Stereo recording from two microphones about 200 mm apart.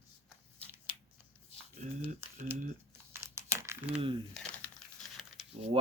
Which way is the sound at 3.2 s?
15° right (ahead or behind).